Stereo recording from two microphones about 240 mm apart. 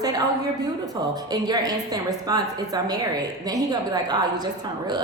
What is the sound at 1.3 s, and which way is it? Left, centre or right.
A woman's voice, centre.